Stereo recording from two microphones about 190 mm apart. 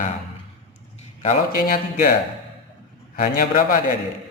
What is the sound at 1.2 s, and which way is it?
Speech, 45° left (ahead or behind).